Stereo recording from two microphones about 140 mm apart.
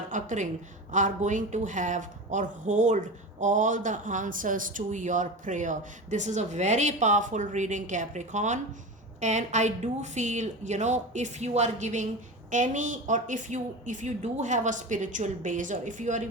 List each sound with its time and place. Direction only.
0.1 s a woman's voice: 65° right (ahead or behind)